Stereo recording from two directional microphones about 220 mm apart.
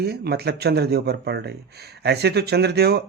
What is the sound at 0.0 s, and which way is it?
Speech, 45° right (ahead or behind).